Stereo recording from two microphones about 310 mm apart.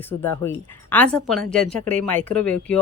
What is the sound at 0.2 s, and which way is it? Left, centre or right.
A woman's voice, centre.